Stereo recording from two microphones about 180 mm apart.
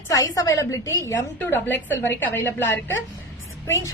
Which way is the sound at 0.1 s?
20° left (ahead or behind).